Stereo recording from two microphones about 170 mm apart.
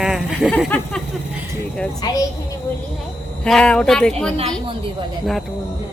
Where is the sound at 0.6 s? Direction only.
10° left (ahead or behind).